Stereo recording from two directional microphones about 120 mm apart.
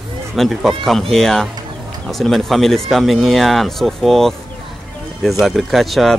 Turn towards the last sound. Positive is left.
turn(degrees=0)  # may be behind; listen again after turning